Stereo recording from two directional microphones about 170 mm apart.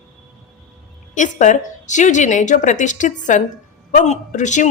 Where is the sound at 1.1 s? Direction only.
45° left (ahead or behind).